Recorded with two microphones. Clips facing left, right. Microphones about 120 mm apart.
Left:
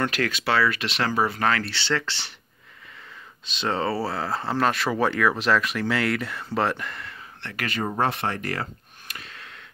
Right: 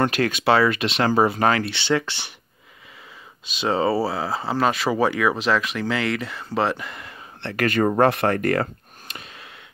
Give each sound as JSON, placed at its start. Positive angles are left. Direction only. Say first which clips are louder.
{"t": 0.0, "sound": "speech", "louder": "right 5 dB", "side_deg": -25}
{"t": 3.4, "sound": "speech", "louder": "right 4 dB", "side_deg": -10}
{"t": 7.5, "sound": "speech", "louder": "right 9 dB", "side_deg": -50}
{"t": 7.8, "sound": "speech", "louder": "right 7 dB", "side_deg": -70}
{"t": 9.0, "sound": "a sound", "louder": "right 2 dB", "side_deg": -20}